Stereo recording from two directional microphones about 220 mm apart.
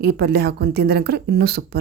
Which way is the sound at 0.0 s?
45° right (ahead or behind).